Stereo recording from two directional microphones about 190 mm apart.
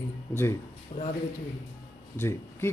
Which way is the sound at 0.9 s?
40° left (ahead or behind).